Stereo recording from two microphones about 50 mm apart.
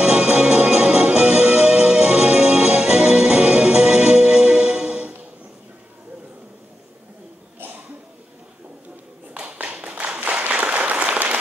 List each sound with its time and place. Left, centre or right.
0.0 s music: right
9.3 s clapping: right
9.8 s applause: right